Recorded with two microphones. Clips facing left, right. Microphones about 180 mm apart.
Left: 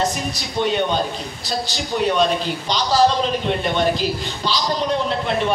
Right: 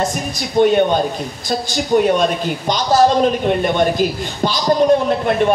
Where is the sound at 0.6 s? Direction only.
50° right (ahead or behind).